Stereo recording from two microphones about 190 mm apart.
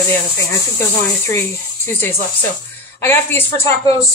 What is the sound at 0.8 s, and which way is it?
Speech, 15° left (ahead or behind).